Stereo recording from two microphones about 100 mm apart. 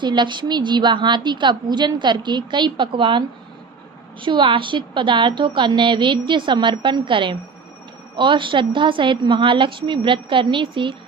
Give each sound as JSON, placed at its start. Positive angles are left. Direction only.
{"t": 0.0, "sound": "a woman's voice", "side_deg": -50}